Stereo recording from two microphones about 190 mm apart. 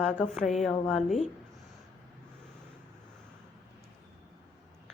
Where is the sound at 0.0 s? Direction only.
Centre (ahead or behind).